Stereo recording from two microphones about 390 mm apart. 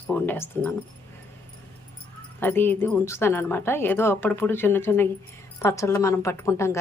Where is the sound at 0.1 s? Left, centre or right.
Centre.